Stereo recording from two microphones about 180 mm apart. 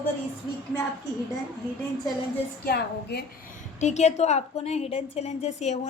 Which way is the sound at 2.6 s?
60° left (ahead or behind).